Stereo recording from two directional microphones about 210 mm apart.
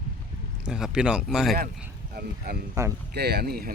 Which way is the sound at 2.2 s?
45° right (ahead or behind).